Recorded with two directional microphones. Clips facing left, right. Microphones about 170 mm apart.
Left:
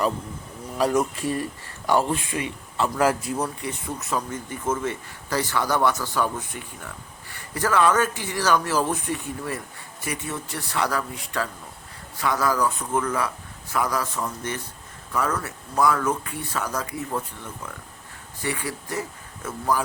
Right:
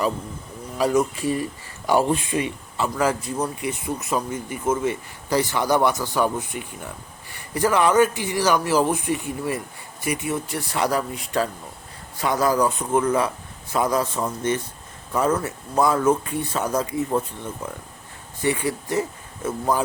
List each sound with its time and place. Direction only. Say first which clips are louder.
0.8 s speech: right 2 dB; centre (ahead or behind)
1.9 s speech: right 2 dB; 10° right (ahead or behind)
2.9 s speech: left 1 dB; 5° left (ahead or behind)
3.4 s speech: right 3 dB; 10° right (ahead or behind)